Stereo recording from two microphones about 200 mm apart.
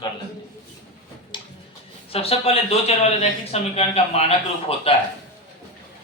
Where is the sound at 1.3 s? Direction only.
25° left (ahead or behind).